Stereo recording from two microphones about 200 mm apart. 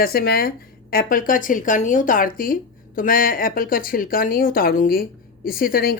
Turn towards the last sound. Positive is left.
turn(degrees=45)  # may be behind; listen again after turning